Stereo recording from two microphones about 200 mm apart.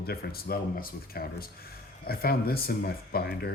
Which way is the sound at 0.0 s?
50° left (ahead or behind).